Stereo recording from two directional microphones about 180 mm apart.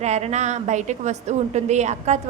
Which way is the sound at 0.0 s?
40° right (ahead or behind).